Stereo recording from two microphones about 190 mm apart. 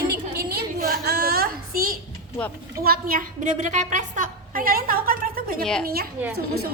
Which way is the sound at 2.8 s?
50° right (ahead or behind).